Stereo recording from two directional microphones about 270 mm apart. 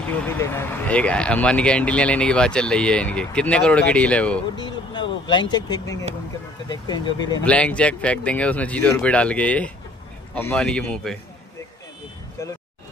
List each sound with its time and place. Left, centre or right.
0.3 s speech: centre
4.6 s speech: centre
7.4 s speech: centre